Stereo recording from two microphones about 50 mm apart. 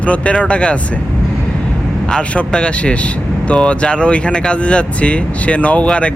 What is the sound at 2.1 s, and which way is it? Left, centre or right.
Speech, centre.